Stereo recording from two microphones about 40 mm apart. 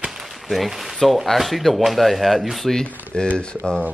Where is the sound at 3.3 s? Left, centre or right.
Left.